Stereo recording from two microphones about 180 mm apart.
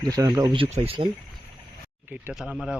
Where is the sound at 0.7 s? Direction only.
35° right (ahead or behind).